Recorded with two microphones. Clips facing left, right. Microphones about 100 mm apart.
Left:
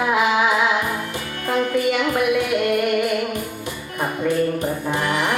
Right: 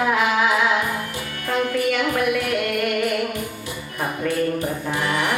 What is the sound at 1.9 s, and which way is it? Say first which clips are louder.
Music: left 2 dB; 15° left (ahead or behind).